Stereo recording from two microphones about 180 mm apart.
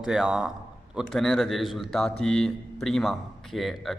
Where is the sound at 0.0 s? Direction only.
5° right (ahead or behind).